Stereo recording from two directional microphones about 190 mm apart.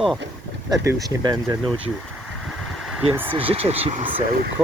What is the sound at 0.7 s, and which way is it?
Speech, 20° right (ahead or behind).